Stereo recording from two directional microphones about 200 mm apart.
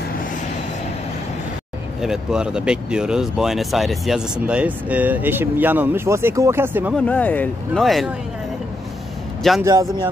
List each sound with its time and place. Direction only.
2.0 s speech: 5° right (ahead or behind)
7.1 s speech: 10° left (ahead or behind)
9.7 s speech: 15° right (ahead or behind)